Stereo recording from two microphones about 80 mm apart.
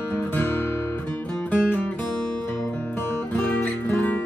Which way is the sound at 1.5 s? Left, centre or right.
Centre.